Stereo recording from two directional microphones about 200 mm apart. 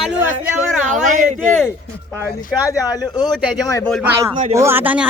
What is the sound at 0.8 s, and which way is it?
Speech, 40° right (ahead or behind).